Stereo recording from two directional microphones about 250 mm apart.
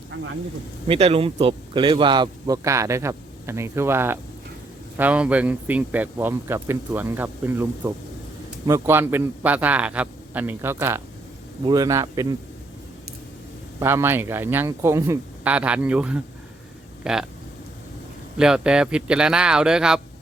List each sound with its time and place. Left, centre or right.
0.1 s speech: right
0.9 s speech: right
13.7 s speech: centre
18.3 s speech: centre